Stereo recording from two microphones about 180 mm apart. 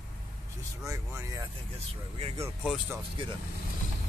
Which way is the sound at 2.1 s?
35° right (ahead or behind).